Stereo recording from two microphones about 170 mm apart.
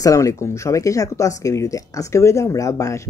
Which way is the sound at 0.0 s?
20° left (ahead or behind).